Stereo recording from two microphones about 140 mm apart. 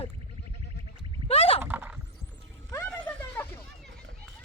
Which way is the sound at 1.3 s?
45° left (ahead or behind).